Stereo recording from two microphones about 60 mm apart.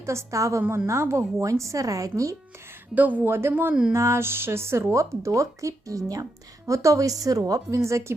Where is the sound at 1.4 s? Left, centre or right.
Right.